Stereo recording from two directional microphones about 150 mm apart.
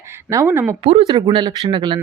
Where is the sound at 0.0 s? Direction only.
15° right (ahead or behind).